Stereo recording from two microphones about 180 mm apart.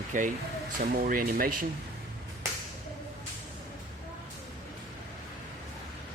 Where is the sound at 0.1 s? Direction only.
45° right (ahead or behind).